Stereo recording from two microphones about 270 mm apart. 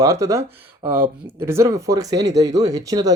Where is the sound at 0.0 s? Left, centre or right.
Centre.